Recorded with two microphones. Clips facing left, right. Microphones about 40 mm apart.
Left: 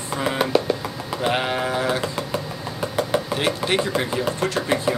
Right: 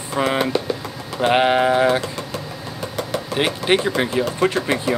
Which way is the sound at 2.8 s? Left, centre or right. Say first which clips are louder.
Left 3 dB; centre.